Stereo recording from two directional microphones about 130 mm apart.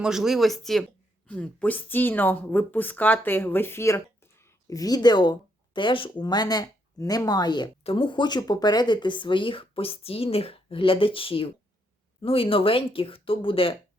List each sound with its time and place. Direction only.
0.0 s speech: 5° right (ahead or behind); by 13.7 s 45° left (ahead or behind)